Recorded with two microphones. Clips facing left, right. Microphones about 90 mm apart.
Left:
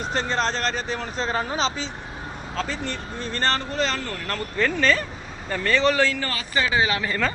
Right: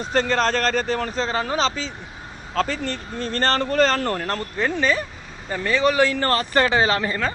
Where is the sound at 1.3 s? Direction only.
70° right (ahead or behind).